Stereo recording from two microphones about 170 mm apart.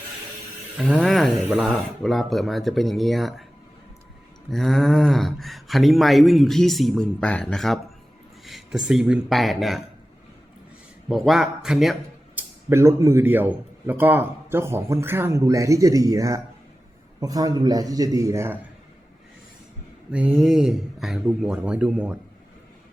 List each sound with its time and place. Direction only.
0.9 s speech: centre (ahead or behind)
4.4 s speech: centre (ahead or behind)
11.1 s speech: centre (ahead or behind)
12.4 s a man's voice: 15° right (ahead or behind)
20.1 s speech: 10° right (ahead or behind)